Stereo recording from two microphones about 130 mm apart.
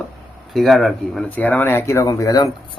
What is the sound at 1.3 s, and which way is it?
Speech, 10° left (ahead or behind).